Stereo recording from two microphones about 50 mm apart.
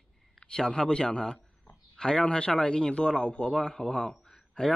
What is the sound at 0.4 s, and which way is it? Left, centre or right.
A man's voice, centre.